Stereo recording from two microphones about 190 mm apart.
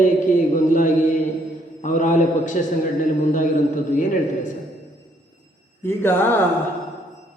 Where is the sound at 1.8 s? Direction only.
40° left (ahead or behind).